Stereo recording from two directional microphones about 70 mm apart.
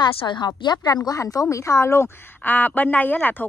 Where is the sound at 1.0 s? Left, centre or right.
Left.